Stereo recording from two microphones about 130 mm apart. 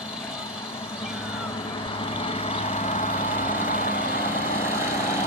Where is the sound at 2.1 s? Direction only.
45° left (ahead or behind); by 4.0 s 90° left.